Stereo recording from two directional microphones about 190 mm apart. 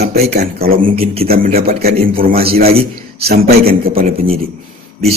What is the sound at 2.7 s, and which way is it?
Speech, 30° right (ahead or behind).